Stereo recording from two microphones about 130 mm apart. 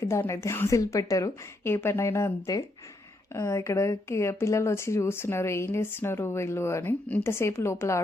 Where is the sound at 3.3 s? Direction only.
25° left (ahead or behind).